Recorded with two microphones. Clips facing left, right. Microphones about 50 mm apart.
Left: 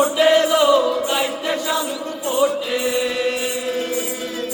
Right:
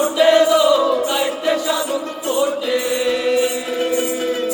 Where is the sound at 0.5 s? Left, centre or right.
Left.